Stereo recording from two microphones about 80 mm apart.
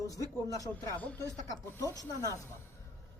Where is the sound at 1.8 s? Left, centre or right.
Left.